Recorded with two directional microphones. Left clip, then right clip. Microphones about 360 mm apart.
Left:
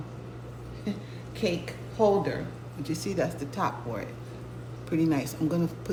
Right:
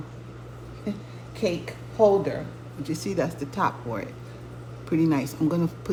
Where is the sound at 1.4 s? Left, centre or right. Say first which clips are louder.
Right 3 dB; centre.